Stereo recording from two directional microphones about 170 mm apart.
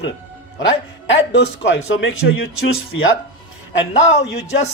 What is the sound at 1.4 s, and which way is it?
Speech, 90° left.